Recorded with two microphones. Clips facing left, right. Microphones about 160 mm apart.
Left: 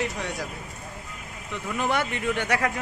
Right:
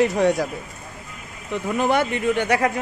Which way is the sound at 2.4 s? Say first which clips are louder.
Right 4 dB; 15° right (ahead or behind).